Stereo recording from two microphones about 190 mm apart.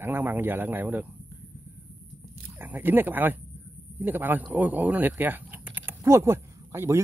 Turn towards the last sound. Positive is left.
turn(degrees=-15)  # may be behind; listen again after turning